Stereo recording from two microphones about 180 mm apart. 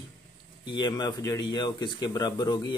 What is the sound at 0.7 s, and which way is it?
Speech, 25° left (ahead or behind).